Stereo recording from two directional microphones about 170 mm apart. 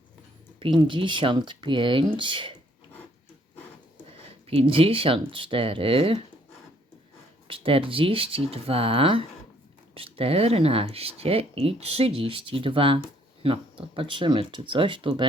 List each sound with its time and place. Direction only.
0.6 s speech: 30° right (ahead or behind)
4.4 s speech: 35° right (ahead or behind)
7.4 s speech: 30° right (ahead or behind)